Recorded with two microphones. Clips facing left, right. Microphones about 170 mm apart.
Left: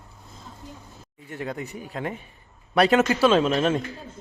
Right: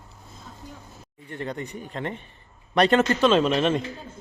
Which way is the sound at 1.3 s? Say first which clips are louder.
Even; 5° left (ahead or behind).